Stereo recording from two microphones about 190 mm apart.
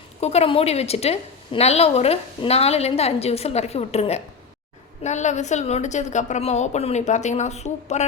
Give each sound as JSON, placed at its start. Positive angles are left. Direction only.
{"t": 0.2, "sound": "a woman's voice", "side_deg": 35}